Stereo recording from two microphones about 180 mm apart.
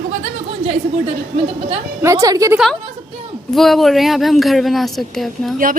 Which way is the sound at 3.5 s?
Centre (ahead or behind).